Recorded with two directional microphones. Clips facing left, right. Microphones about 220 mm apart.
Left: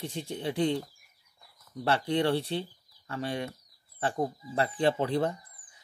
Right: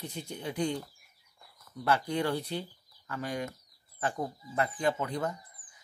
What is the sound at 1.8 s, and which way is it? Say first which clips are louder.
Speech: left 3 dB; 30° left (ahead or behind).